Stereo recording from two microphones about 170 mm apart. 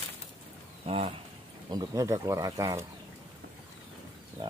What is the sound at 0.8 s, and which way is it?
Speech, 35° right (ahead or behind).